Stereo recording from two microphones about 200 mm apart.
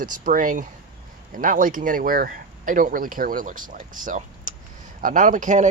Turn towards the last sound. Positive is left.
turn(degrees=-40)  # may be behind; listen again after turning